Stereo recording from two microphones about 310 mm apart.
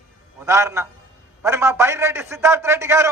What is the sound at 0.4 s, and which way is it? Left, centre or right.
A man's voice, centre.